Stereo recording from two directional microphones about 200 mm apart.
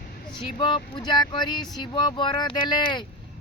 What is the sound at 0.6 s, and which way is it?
Speech, 25° left (ahead or behind).